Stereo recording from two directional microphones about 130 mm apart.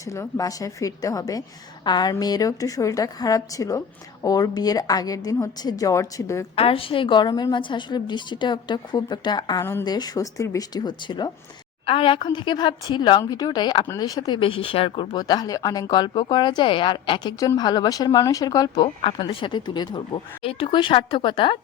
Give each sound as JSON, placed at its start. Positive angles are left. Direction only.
{"t": 0.0, "sound": "a woman's voice", "side_deg": 25}
{"t": 6.6, "sound": "a woman's voice", "side_deg": 45}
{"t": 18.8, "sound": "speech", "side_deg": 40}